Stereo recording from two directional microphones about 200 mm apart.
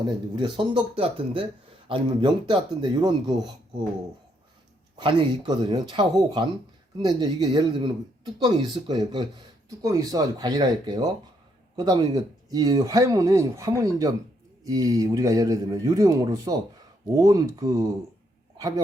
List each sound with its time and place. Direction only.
0.3 s speech: 25° right (ahead or behind)
4.9 s speech: 25° right (ahead or behind)